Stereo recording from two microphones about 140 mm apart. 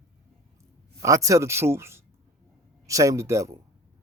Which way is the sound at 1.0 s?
25° right (ahead or behind).